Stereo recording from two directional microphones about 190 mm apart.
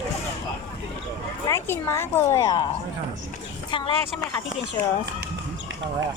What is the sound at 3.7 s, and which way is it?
Speech, 25° left (ahead or behind).